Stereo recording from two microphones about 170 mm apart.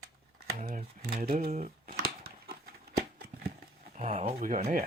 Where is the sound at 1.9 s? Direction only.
60° right (ahead or behind).